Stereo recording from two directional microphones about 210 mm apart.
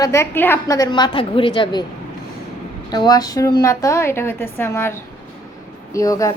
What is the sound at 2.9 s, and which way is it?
A woman's voice, 20° left (ahead or behind).